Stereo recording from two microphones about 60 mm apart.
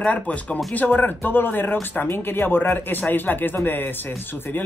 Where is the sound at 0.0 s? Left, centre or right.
Left.